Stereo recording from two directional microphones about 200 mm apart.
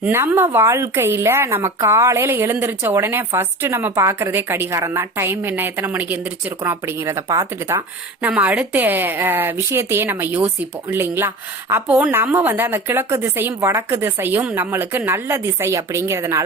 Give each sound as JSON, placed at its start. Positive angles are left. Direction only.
{"t": 0.0, "sound": "a woman's voice", "side_deg": -10}